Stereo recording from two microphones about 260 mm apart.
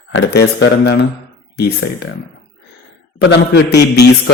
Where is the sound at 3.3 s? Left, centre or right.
Left.